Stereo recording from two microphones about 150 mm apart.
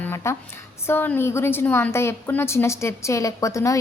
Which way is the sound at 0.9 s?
15° left (ahead or behind).